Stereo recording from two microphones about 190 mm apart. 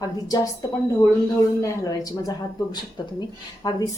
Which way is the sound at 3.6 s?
20° left (ahead or behind).